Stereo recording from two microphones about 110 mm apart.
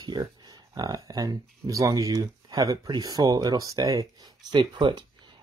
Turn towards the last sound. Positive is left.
turn(degrees=-45)  # may be behind; listen again after turning